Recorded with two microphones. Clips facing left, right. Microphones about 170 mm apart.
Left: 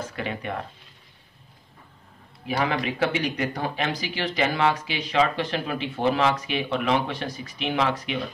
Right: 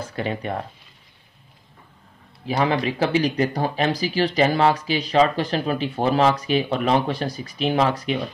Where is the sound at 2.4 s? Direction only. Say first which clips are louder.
Right 4 dB; 30° right (ahead or behind).